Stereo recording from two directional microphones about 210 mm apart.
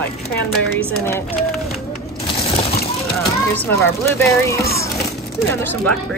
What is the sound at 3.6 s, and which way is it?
Speech, 10° left (ahead or behind).